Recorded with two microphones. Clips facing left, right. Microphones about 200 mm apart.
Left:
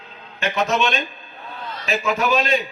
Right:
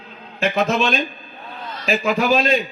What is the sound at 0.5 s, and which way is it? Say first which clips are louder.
Speech: right 1 dB; 30° right (ahead or behind).